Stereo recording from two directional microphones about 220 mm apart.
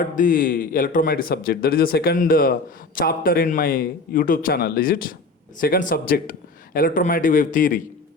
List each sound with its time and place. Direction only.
0.0 s speech: 40° left (ahead or behind)